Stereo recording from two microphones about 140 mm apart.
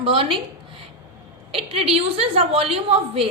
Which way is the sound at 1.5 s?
45° right (ahead or behind).